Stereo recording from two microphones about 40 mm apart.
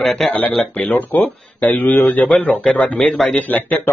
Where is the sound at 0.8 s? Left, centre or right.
Left.